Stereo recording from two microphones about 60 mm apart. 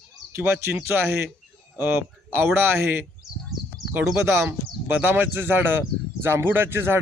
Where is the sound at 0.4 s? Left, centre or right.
Right.